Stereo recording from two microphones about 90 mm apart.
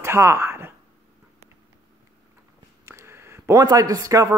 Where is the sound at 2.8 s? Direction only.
30° right (ahead or behind).